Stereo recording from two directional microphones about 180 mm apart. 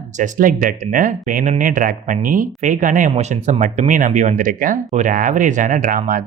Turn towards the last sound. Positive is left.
turn(degrees=-50)  # may be behind; listen again after turning